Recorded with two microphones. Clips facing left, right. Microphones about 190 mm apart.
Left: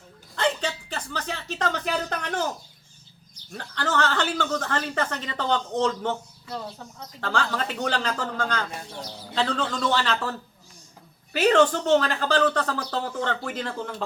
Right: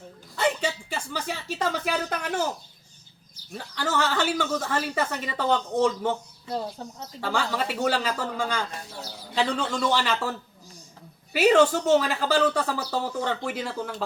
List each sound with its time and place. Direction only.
0.3 s a sound: 10° right (ahead or behind)
3.3 s speech: 5° right (ahead or behind)
6.5 s speech: 35° right (ahead or behind)
7.0 s speech: 10° right (ahead or behind)